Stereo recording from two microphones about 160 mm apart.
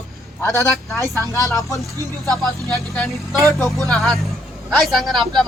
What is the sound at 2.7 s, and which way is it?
A man's voice, centre (ahead or behind).